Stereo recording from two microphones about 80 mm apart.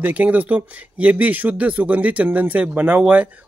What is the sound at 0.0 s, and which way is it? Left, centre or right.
Speech, centre.